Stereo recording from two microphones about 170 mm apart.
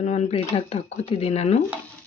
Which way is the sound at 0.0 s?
40° left (ahead or behind).